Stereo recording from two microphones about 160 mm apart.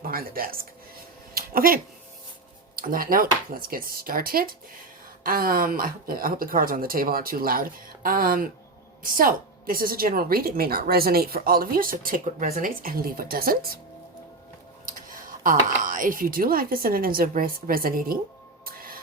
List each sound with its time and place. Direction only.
0.1 s speech: 65° right (ahead or behind)
1.3 s a sound: 65° right (ahead or behind)
2.7 s a woman's voice: 65° right (ahead or behind)
15.0 s a woman's voice: 60° right (ahead or behind)
18.6 s music: 65° right (ahead or behind)